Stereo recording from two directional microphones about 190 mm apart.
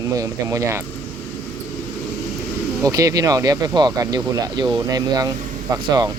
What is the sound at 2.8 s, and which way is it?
Speech, 20° right (ahead or behind).